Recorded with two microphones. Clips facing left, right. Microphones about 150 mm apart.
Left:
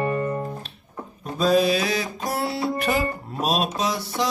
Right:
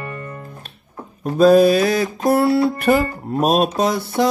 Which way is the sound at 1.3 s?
50° right (ahead or behind).